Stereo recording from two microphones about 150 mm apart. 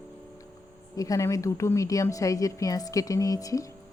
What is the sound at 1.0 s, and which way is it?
A woman's voice, 25° left (ahead or behind).